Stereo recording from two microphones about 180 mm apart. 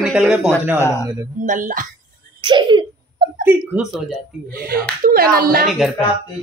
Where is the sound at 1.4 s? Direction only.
45° right (ahead or behind).